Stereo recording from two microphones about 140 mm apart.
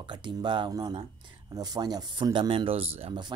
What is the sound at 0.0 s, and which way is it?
Speech, 35° right (ahead or behind).